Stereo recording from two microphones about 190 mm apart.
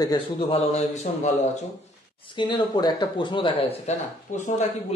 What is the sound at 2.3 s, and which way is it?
A man's voice, 25° left (ahead or behind).